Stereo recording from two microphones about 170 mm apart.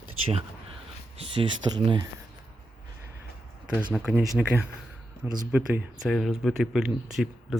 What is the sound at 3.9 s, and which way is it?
Speech, 5° right (ahead or behind).